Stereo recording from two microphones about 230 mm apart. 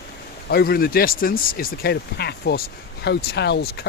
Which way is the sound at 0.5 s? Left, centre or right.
Left.